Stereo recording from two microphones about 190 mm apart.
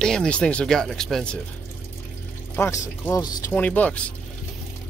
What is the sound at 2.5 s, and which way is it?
Speech, 10° left (ahead or behind).